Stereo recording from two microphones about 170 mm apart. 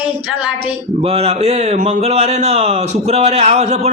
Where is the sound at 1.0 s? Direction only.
35° right (ahead or behind).